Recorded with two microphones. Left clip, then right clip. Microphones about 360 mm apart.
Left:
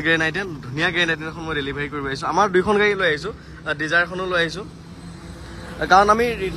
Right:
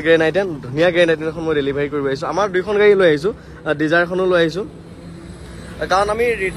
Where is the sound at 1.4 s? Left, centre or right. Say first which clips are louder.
Right 7 dB; centre.